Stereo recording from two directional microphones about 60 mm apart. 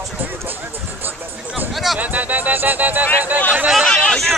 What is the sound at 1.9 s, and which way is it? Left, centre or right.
Music, right.